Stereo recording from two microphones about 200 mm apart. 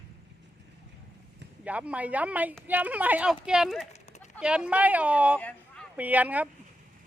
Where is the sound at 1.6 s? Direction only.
5° right (ahead or behind).